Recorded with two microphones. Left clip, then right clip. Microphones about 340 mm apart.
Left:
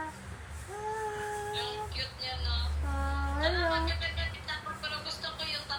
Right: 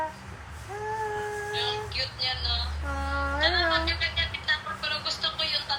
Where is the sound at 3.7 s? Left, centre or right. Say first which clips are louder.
Right 6 dB; centre.